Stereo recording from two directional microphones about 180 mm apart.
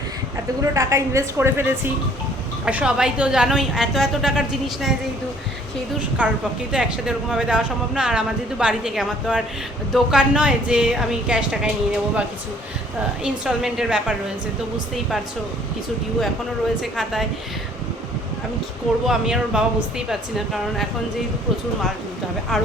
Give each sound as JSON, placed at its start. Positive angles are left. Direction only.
{"t": 0.6, "sound": "speech", "side_deg": -15}
{"t": 6.1, "sound": "speech", "side_deg": -5}
{"t": 13.2, "sound": "speech", "side_deg": -5}
{"t": 16.8, "sound": "speech", "side_deg": 0}
{"t": 19.0, "sound": "speech", "side_deg": 0}
{"t": 22.5, "sound": "speech", "side_deg": 0}